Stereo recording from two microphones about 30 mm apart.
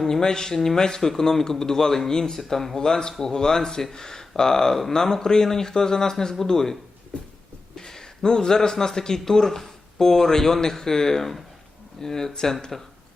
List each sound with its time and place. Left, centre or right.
0.0 s a man's voice: centre
7.8 s a man's voice: centre